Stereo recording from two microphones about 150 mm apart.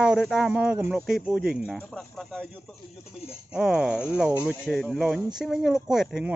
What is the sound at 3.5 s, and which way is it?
Speech, 5° right (ahead or behind).